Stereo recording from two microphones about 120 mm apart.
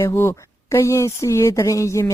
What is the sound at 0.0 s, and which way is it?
Speech, 20° left (ahead or behind).